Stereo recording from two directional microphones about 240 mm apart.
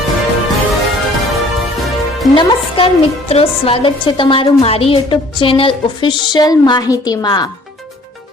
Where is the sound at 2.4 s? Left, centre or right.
Centre.